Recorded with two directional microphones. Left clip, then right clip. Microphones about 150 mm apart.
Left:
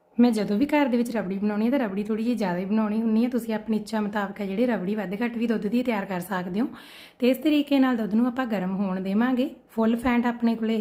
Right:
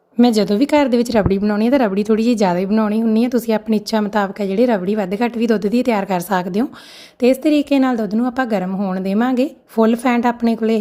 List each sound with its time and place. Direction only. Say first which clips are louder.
0.2 s speech: right 8 dB; 35° right (ahead or behind)
1.4 s a woman's voice: right 9 dB; 30° right (ahead or behind)
1.6 s a woman's voice: right 11 dB; 40° right (ahead or behind)